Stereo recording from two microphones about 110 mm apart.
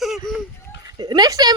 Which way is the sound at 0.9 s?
40° right (ahead or behind).